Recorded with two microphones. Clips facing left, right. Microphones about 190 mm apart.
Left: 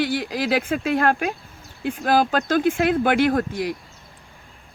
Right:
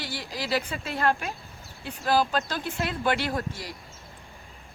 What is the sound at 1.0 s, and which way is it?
Speech, 55° left (ahead or behind).